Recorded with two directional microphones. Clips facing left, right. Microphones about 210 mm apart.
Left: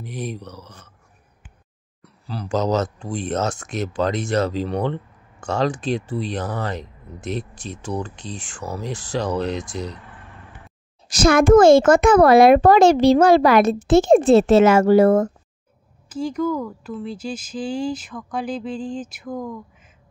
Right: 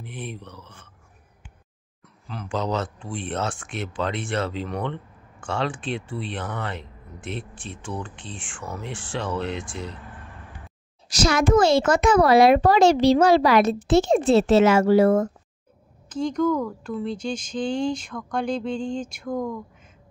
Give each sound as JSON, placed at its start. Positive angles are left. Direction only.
{"t": 0.0, "sound": "speech", "side_deg": 40}
{"t": 2.2, "sound": "speech", "side_deg": 40}
{"t": 11.1, "sound": "a child's voice", "side_deg": 50}
{"t": 16.1, "sound": "speech", "side_deg": 5}